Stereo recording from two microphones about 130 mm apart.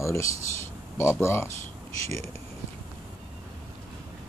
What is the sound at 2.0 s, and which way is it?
Speech, 55° right (ahead or behind).